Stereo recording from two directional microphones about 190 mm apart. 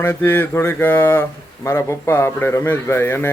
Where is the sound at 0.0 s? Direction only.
10° left (ahead or behind).